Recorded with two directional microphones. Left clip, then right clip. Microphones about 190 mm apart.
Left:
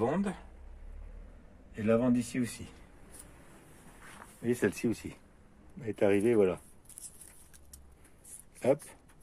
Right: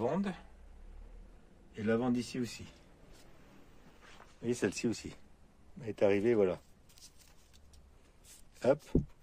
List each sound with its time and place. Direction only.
0.0 s speech: 15° right (ahead or behind)
1.9 s speech: 10° right (ahead or behind)
4.4 s speech: 20° right (ahead or behind)
8.5 s speech: 25° right (ahead or behind)